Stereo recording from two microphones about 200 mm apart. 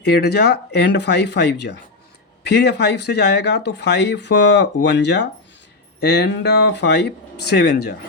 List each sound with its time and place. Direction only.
0.0 s speech: 55° left (ahead or behind)